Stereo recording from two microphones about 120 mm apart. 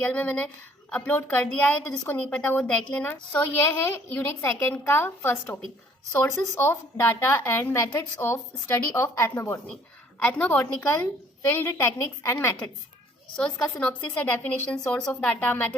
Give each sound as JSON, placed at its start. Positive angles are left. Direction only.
{"t": 0.0, "sound": "a woman's voice", "side_deg": 15}
{"t": 13.3, "sound": "a woman's voice", "side_deg": 5}